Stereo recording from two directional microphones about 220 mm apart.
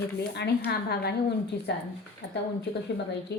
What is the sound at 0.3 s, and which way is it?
Speech, 45° left (ahead or behind).